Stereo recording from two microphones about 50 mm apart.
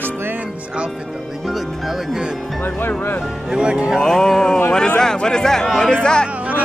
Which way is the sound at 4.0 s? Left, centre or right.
Centre.